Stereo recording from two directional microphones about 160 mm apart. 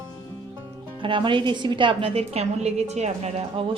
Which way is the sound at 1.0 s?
30° right (ahead or behind).